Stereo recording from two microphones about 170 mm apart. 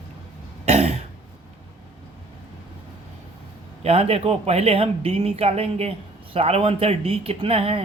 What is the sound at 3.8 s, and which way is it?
Speech, 35° right (ahead or behind).